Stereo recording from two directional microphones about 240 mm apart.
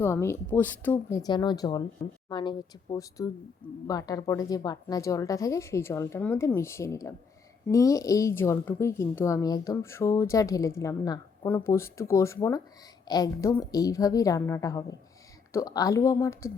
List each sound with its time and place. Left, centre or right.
0.0 s a woman's voice: centre